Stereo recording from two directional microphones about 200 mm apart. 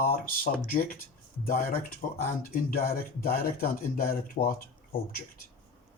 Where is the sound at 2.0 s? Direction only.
35° left (ahead or behind).